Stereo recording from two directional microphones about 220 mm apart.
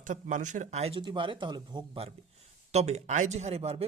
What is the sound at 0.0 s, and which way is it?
Speech, 35° right (ahead or behind).